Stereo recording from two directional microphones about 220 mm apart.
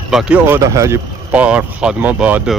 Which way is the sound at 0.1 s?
5° right (ahead or behind).